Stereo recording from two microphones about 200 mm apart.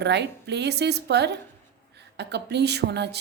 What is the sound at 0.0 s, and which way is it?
A woman's voice, 60° right (ahead or behind).